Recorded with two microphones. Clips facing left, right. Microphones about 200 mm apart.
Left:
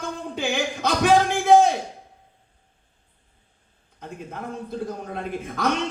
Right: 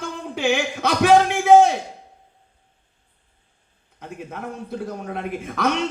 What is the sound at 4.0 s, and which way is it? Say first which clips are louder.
A man's voice: right 2 dB; 65° right (ahead or behind).